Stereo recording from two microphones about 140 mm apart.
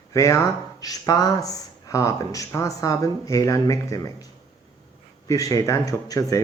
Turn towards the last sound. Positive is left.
turn(degrees=25)  # may be behind; listen again after turning